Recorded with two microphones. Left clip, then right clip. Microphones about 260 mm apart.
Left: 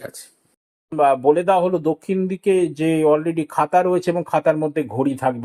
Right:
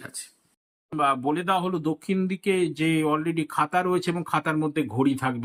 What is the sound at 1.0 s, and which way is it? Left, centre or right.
Speech, centre.